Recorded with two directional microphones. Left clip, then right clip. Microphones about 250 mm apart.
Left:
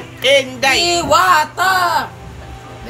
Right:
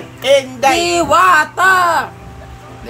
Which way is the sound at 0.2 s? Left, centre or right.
Right.